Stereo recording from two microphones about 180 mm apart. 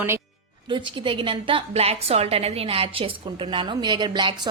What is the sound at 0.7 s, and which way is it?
A woman's voice, 25° right (ahead or behind).